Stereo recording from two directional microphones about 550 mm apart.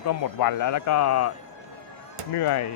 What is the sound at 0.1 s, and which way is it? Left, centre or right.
A man's voice, left.